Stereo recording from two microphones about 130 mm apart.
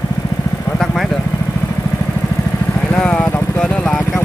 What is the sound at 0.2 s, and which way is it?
Vehicle, 20° left (ahead or behind).